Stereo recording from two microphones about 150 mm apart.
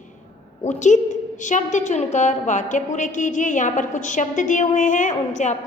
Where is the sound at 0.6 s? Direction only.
50° left (ahead or behind).